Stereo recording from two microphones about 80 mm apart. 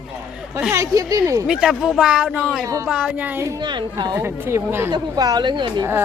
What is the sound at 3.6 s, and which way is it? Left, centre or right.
Speech, right.